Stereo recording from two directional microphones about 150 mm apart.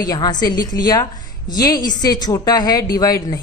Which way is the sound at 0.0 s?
25° left (ahead or behind).